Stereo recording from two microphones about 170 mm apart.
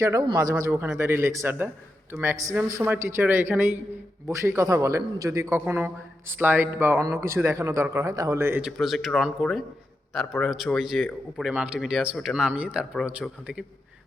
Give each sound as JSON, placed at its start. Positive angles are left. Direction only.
{"t": 0.0, "sound": "a man's voice", "side_deg": -20}